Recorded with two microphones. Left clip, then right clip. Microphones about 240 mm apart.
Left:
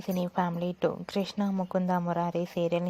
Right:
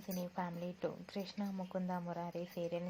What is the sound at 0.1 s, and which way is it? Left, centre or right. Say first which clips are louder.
A woman's voice: left 13 dB; left.